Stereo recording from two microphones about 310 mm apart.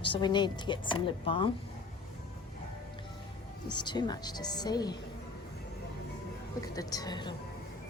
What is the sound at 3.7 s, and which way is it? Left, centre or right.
Speech, centre.